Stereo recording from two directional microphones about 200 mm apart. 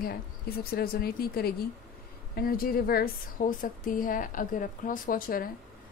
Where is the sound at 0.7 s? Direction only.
50° left (ahead or behind).